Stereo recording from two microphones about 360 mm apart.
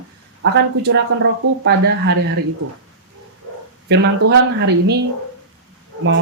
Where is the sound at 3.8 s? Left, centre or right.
Right.